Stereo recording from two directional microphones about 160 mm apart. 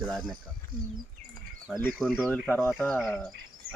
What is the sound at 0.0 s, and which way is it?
Speech, centre (ahead or behind).